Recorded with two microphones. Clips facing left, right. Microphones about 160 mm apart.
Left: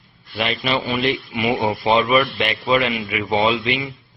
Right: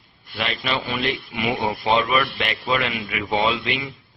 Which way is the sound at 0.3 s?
10° left (ahead or behind).